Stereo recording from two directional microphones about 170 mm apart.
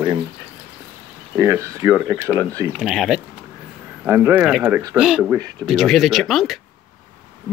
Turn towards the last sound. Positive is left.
turn(degrees=0)  # may be behind; listen again after turning